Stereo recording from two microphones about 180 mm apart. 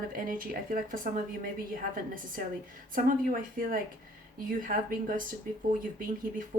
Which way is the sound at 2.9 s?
50° right (ahead or behind).